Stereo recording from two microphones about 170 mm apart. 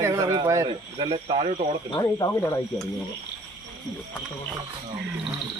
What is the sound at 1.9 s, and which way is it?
Speech, 20° left (ahead or behind).